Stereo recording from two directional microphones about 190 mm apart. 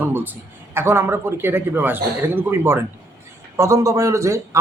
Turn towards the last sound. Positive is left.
turn(degrees=-15)  # may be behind; listen again after turning